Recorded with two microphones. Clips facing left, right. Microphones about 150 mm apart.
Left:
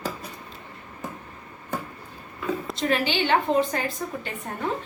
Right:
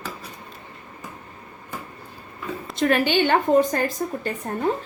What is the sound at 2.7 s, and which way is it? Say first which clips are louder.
A woman's voice: right 7 dB; 55° right (ahead or behind).